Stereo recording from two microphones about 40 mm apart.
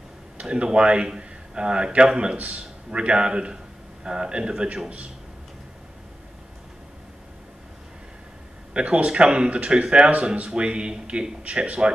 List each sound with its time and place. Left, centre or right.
0.4 s speech: right
2.3 s speech: right
8.7 s speech: right